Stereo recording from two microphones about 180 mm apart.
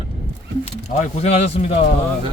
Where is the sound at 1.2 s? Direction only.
35° left (ahead or behind).